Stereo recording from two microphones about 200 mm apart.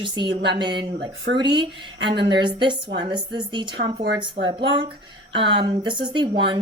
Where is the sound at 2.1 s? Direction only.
60° right (ahead or behind).